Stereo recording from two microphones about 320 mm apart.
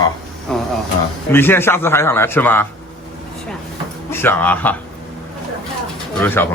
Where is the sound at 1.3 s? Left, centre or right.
Centre.